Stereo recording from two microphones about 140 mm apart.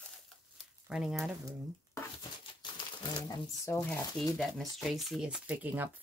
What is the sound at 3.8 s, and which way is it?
Speech, 5° left (ahead or behind).